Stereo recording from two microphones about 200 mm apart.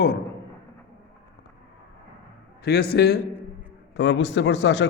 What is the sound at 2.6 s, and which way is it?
A man's voice, 50° left (ahead or behind).